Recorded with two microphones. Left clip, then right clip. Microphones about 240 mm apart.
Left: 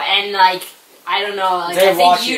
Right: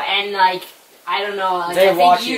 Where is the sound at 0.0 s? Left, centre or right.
Centre.